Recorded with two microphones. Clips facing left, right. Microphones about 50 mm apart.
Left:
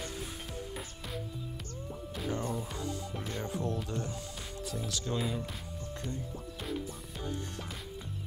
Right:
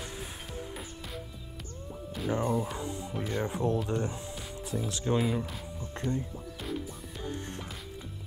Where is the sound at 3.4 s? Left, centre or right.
Right.